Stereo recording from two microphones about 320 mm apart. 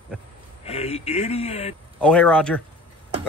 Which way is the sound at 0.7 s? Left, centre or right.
Centre.